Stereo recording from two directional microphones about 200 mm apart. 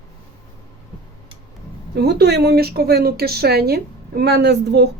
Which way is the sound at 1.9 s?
55° right (ahead or behind).